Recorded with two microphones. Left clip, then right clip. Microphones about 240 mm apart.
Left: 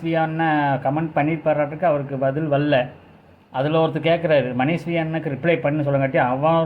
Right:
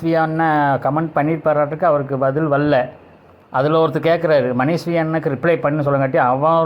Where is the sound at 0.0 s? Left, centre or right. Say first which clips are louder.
Right 4 dB; right.